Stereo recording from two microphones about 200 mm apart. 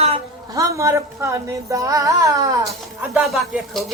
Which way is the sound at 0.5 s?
15° right (ahead or behind).